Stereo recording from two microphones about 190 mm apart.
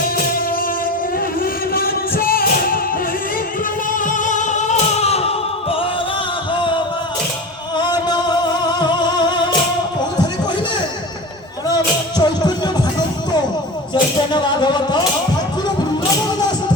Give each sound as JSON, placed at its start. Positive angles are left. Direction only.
{"t": 1.7, "sound": "music", "side_deg": 50}
{"t": 4.0, "sound": "music", "side_deg": 40}
{"t": 6.6, "sound": "music", "side_deg": 25}
{"t": 11.7, "sound": "music", "side_deg": 20}
{"t": 13.9, "sound": "music", "side_deg": 25}